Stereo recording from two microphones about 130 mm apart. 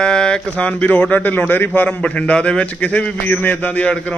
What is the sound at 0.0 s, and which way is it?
A man's voice, 5° left (ahead or behind).